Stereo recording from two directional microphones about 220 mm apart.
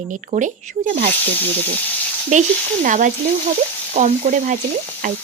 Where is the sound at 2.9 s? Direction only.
35° right (ahead or behind).